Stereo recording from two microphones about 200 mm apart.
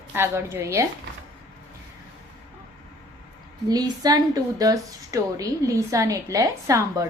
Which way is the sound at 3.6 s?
20° right (ahead or behind).